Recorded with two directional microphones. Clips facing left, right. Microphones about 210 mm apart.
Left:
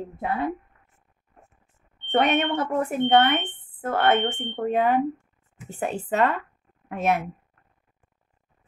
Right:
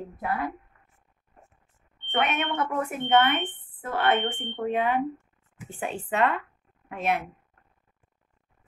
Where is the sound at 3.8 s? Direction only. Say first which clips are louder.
Left 3 dB; 45° left (ahead or behind).